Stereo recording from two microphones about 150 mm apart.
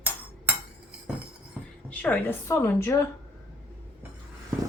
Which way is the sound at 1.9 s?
10° left (ahead or behind).